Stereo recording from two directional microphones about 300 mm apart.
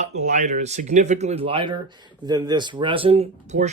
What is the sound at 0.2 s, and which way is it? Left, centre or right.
Speech, right.